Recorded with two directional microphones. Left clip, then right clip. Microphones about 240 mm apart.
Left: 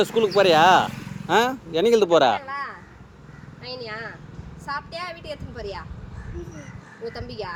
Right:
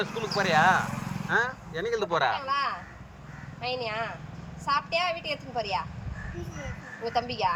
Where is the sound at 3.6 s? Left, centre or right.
Centre.